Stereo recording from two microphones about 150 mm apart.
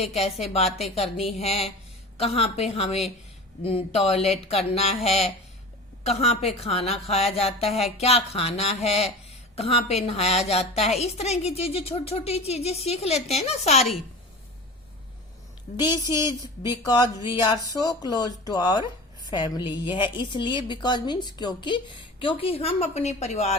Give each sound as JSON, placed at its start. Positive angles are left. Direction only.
{"t": 0.0, "sound": "a woman's voice", "side_deg": 45}
{"t": 15.7, "sound": "a woman's voice", "side_deg": 60}
{"t": 16.4, "sound": "a woman's voice", "side_deg": 30}